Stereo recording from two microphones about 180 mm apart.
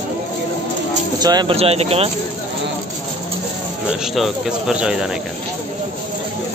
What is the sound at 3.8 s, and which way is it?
A man's voice, centre (ahead or behind).